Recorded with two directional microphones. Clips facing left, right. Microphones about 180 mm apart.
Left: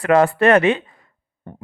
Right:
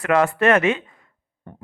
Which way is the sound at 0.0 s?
35° left (ahead or behind).